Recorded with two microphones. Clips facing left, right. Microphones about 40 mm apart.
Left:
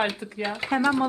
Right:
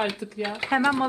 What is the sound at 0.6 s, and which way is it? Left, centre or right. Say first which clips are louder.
Speech: right 1 dB; centre.